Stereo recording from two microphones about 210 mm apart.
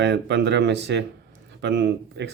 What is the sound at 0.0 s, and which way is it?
Speech, 55° right (ahead or behind).